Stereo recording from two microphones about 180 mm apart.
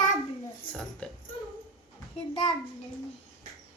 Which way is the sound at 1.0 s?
5° left (ahead or behind).